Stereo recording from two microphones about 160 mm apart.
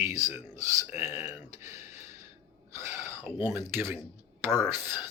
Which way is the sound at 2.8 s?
15° right (ahead or behind).